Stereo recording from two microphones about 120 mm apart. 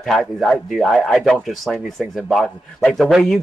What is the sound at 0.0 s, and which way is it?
A man's voice, centre (ahead or behind).